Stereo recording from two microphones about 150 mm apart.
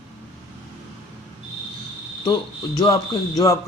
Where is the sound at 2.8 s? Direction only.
25° left (ahead or behind).